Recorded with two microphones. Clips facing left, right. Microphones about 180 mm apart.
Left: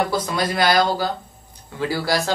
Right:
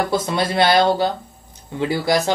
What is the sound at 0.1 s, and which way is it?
Speech, 25° right (ahead or behind).